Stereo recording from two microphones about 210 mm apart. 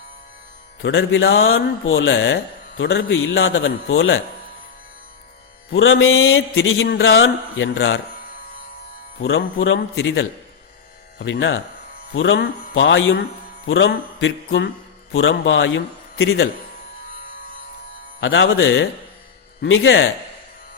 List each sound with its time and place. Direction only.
0.8 s speech: 70° left (ahead or behind)
5.7 s speech: 70° left (ahead or behind)
9.2 s speech: 70° left (ahead or behind)
11.2 s music: 65° left (ahead or behind)
12.1 s speech: 65° left (ahead or behind)
14.2 s music: 60° left (ahead or behind)
15.1 s a man's voice: 70° left (ahead or behind)
18.2 s speech: 65° left (ahead or behind)